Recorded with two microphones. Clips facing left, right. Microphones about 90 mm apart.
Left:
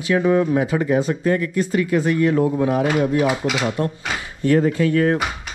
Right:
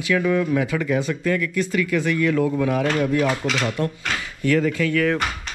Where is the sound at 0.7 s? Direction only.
25° left (ahead or behind).